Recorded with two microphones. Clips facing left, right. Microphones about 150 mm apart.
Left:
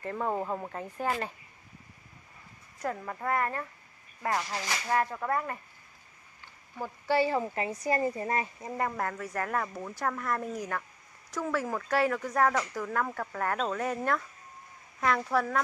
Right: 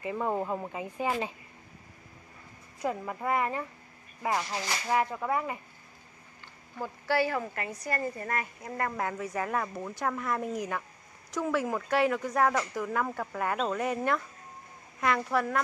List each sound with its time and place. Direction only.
0.0 s speech: 5° right (ahead or behind)
2.8 s speech: 10° right (ahead or behind)
6.8 s speech: 20° left (ahead or behind)
8.9 s speech: 10° right (ahead or behind)
10.4 s speech: 15° right (ahead or behind); by 15.6 s centre (ahead or behind)